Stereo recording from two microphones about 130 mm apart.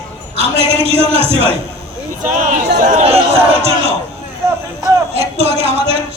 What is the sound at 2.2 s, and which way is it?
Chatter, 75° right (ahead or behind).